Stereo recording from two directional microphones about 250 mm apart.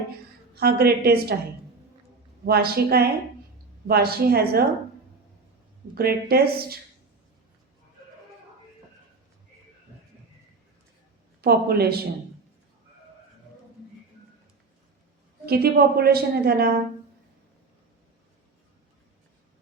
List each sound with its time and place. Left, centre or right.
0.5 s a woman's voice: right
2.4 s a woman's voice: right
5.9 s a woman's voice: right
11.3 s a woman's voice: right
15.4 s a woman's voice: right